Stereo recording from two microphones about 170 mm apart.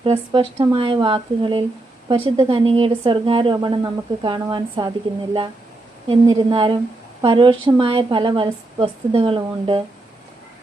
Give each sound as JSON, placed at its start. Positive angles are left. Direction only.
{"t": 0.0, "sound": "a woman's voice", "side_deg": -30}